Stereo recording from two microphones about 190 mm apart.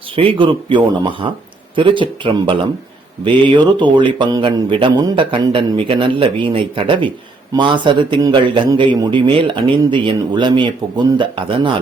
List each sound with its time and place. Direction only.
0.2 s speech: 25° right (ahead or behind)